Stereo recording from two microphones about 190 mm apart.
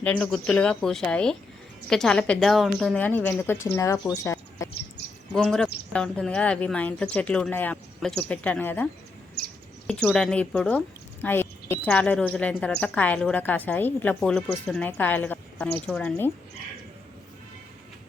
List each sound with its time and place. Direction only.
0.0 s speech: 5° left (ahead or behind)
5.3 s speech: 5° left (ahead or behind)
9.4 s chirp: 60° left (ahead or behind)
9.8 s a woman's voice: centre (ahead or behind)